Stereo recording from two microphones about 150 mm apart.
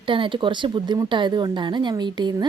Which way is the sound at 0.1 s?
35° right (ahead or behind).